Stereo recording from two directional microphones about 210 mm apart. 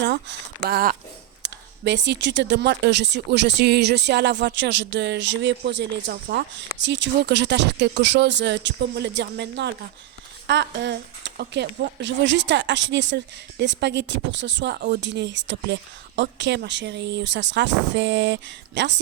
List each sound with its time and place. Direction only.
0.0 s a sound: 55° right (ahead or behind)
0.7 s speech: 45° right (ahead or behind)
1.4 s speech: 55° right (ahead or behind)